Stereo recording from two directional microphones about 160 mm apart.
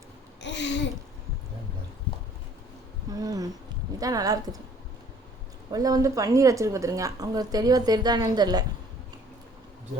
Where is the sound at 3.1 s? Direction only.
25° right (ahead or behind).